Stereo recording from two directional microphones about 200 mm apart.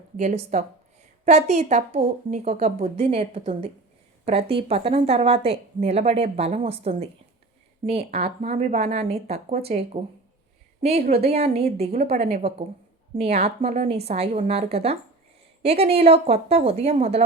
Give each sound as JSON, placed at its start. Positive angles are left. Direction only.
{"t": 0.2, "sound": "a woman's voice", "side_deg": -35}
{"t": 11.2, "sound": "a woman's voice", "side_deg": -30}